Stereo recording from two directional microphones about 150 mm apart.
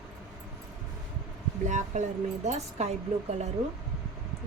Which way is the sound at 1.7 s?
55° right (ahead or behind).